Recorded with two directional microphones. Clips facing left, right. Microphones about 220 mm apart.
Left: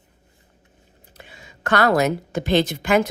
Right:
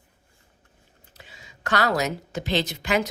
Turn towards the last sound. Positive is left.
turn(degrees=50)  # may be behind; listen again after turning